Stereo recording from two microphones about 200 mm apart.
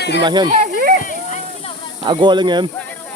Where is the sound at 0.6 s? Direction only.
45° right (ahead or behind).